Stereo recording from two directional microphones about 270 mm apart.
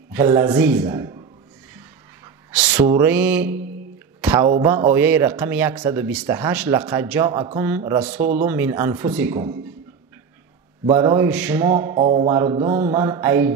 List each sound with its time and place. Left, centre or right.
0.1 s a man's voice: centre
2.5 s a man's voice: centre
8.2 s speech: right
8.5 s a man's voice: centre
10.9 s a man's voice: centre